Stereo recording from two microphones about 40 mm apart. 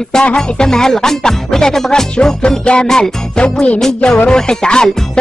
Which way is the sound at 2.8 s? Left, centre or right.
Centre.